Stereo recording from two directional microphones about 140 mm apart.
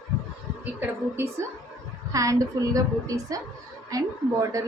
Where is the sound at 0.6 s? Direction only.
15° right (ahead or behind).